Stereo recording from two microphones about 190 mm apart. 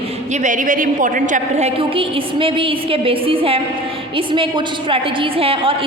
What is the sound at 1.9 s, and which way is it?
A woman's voice, 30° right (ahead or behind).